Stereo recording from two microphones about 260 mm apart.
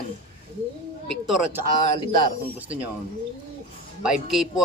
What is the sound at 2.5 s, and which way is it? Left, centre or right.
Speech, centre.